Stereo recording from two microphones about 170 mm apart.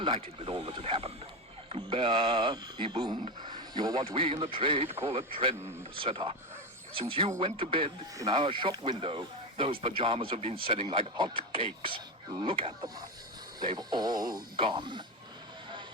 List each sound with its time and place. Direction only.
0.0 s speech: 30° right (ahead or behind)
0.8 s a man's voice: 35° right (ahead or behind)